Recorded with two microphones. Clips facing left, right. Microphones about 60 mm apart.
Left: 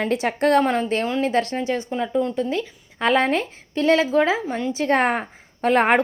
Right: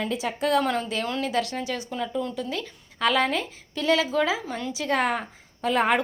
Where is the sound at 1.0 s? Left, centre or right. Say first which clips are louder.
Left 5 dB; left.